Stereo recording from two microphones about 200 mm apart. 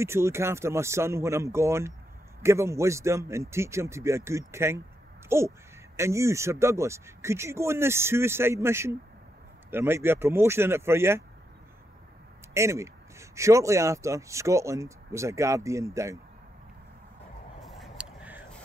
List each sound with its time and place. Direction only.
0.0 s speech: 15° right (ahead or behind)
12.5 s speech: 15° right (ahead or behind)
17.6 s vehicle: 5° right (ahead or behind)